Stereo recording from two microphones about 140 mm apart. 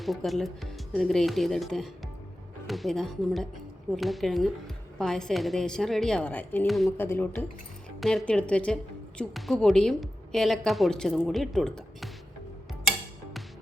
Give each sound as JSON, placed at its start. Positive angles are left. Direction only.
{"t": 0.0, "sound": "a woman's voice", "side_deg": 0}
{"t": 6.7, "sound": "a woman's voice", "side_deg": 0}
{"t": 6.9, "sound": "speech", "side_deg": 15}
{"t": 8.0, "sound": "a woman's voice", "side_deg": 5}